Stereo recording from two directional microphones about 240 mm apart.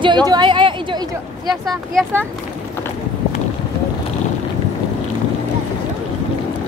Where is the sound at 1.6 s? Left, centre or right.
Centre.